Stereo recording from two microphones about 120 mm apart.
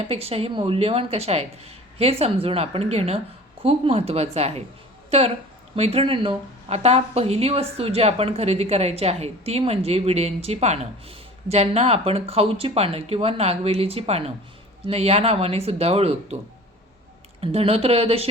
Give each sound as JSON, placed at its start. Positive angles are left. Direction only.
{"t": 0.1, "sound": "speech", "side_deg": -55}
{"t": 5.7, "sound": "speech", "side_deg": -60}
{"t": 17.4, "sound": "speech", "side_deg": -55}